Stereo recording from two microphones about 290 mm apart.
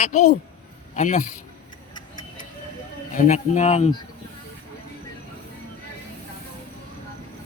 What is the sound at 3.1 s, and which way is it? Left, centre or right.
Speech, left.